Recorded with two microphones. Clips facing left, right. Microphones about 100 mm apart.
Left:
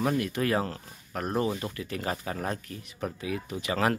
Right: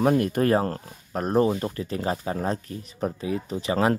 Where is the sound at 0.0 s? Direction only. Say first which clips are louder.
Right 6 dB; 45° right (ahead or behind).